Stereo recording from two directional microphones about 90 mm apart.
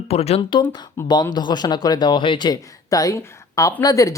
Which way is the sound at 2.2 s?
70° left (ahead or behind).